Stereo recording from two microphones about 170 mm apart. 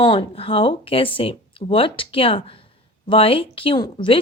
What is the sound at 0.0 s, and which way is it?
A woman's voice, 30° left (ahead or behind).